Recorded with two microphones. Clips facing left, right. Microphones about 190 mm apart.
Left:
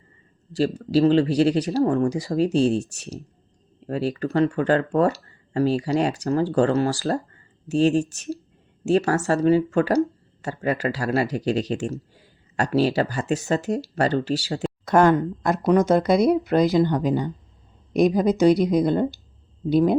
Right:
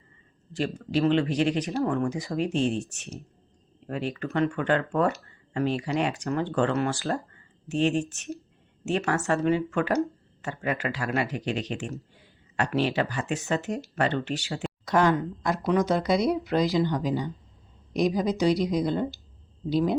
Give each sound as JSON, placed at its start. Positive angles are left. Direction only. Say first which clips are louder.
{"t": 0.5, "sound": "speech", "louder": "left 7 dB", "side_deg": 35}
{"t": 14.8, "sound": "speech", "louder": "left 6 dB", "side_deg": 50}